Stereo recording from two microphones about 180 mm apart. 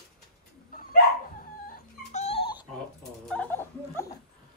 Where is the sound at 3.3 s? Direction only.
10° left (ahead or behind).